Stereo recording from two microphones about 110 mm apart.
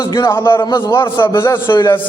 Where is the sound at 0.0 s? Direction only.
35° left (ahead or behind).